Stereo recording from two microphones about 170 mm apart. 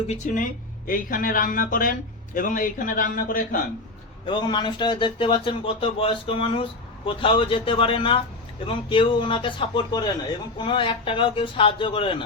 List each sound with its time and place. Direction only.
0.1 s speech: 45° left (ahead or behind)
0.9 s speech: 55° left (ahead or behind)
4.3 s a man's voice: 25° left (ahead or behind)